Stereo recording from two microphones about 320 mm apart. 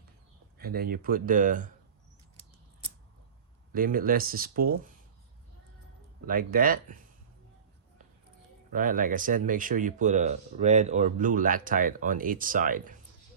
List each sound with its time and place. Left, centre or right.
0.6 s speech: right
3.8 s speech: right
6.2 s speech: right
8.7 s speech: right